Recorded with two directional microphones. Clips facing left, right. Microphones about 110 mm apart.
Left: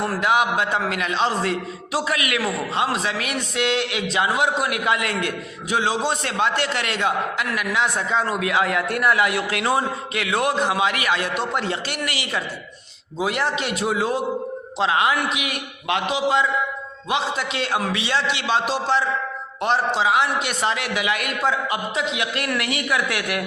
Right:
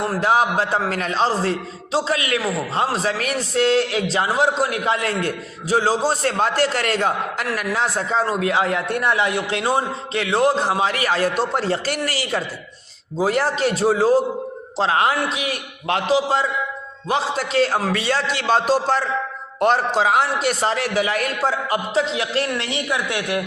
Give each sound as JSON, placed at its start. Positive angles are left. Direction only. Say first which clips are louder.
{"t": 0.0, "sound": "a man's voice", "louder": "right 2 dB", "side_deg": -30}